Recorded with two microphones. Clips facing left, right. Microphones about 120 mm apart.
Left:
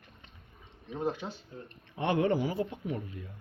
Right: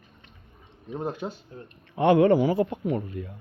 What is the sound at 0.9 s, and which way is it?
Speech, 45° right (ahead or behind).